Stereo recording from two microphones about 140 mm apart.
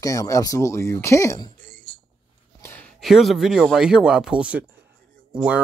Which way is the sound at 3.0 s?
Centre (ahead or behind).